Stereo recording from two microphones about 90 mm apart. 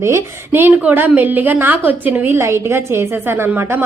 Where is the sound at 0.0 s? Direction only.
30° right (ahead or behind).